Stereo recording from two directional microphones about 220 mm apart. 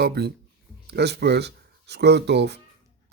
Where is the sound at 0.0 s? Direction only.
45° right (ahead or behind).